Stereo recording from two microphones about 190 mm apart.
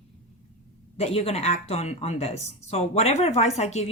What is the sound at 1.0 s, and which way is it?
Speech, 30° left (ahead or behind).